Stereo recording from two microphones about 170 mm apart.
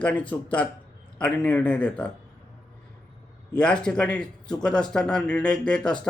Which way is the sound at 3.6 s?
5° left (ahead or behind).